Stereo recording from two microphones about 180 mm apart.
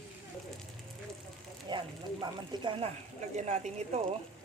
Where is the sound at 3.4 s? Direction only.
40° right (ahead or behind).